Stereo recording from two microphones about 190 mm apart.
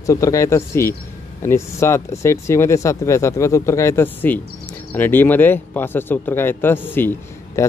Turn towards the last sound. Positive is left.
turn(degrees=10)  # may be behind; listen again after turning